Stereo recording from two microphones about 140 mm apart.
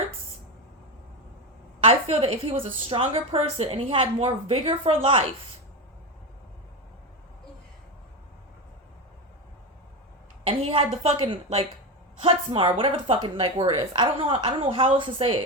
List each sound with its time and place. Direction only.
1.8 s a woman's voice: 45° right (ahead or behind)
10.4 s a woman's voice: 40° right (ahead or behind)